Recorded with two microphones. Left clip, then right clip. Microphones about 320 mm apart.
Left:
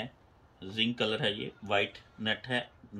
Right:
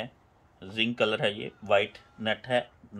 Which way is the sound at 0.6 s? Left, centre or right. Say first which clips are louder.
Right 4 dB; centre.